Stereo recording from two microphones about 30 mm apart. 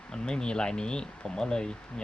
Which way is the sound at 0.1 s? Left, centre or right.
Left.